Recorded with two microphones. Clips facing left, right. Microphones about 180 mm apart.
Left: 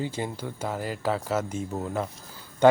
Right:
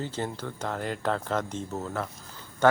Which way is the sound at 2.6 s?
15° left (ahead or behind).